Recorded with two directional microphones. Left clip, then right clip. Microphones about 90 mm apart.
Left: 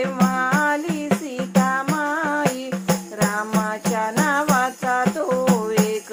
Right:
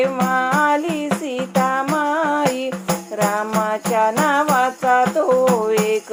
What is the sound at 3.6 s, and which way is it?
Music, 35° right (ahead or behind).